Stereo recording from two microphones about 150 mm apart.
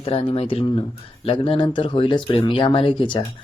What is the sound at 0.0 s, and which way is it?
Speech, 40° left (ahead or behind).